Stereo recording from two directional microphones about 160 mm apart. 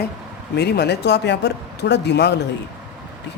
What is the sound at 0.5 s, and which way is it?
Speech, 90° left.